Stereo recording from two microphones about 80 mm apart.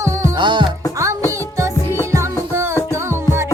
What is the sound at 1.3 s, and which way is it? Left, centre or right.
Music, right.